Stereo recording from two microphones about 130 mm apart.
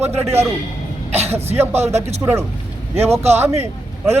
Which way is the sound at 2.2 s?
20° right (ahead or behind).